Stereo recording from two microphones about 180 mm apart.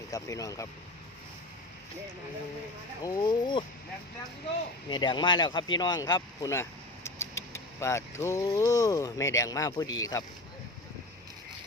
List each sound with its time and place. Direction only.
0.1 s speech: 20° left (ahead or behind)
3.0 s speech: 25° left (ahead or behind)
4.9 s speech: 25° left (ahead or behind)